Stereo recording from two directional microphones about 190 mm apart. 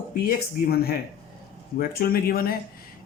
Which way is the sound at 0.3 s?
55° left (ahead or behind).